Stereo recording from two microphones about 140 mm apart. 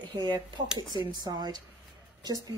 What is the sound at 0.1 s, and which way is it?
A woman's voice, 30° right (ahead or behind).